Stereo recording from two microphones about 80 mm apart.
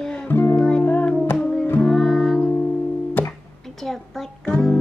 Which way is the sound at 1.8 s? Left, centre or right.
Centre.